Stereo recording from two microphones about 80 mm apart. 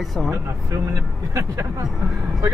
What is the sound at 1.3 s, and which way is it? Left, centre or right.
Speech, right.